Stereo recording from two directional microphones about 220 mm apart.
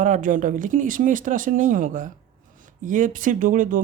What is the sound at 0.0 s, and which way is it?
Speech, 35° right (ahead or behind).